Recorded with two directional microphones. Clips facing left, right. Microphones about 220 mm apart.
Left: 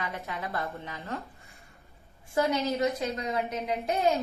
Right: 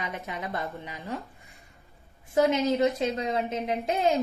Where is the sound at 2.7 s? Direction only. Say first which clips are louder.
Right 4 dB; 30° right (ahead or behind).